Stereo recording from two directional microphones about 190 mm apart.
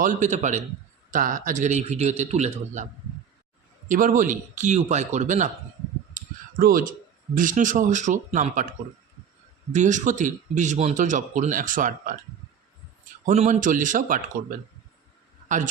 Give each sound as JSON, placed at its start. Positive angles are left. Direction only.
{"t": 0.0, "sound": "speech", "side_deg": -40}
{"t": 3.8, "sound": "speech", "side_deg": -45}
{"t": 6.1, "sound": "a sound", "side_deg": -50}
{"t": 7.3, "sound": "speech", "side_deg": -45}
{"t": 9.7, "sound": "speech", "side_deg": -40}
{"t": 13.2, "sound": "speech", "side_deg": -40}
{"t": 15.4, "sound": "a man's voice", "side_deg": -40}